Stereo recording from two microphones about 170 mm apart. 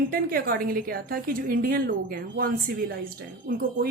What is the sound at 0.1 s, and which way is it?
A woman's voice, 60° right (ahead or behind).